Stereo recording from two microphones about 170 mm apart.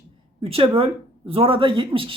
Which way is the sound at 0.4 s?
35° right (ahead or behind).